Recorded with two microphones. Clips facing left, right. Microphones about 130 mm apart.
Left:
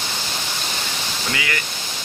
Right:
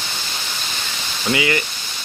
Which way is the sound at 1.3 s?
20° right (ahead or behind).